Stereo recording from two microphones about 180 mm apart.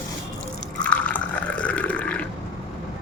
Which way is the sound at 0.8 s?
5° left (ahead or behind).